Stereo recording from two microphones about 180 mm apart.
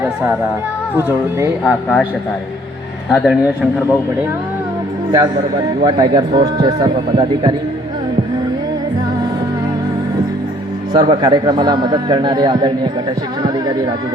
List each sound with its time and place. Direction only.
0.9 s speech: 15° right (ahead or behind)
1.6 s speech: centre (ahead or behind)
3.1 s speech: 5° right (ahead or behind)
5.1 s a man's voice: 25° right (ahead or behind)
10.9 s a man's voice: 25° right (ahead or behind)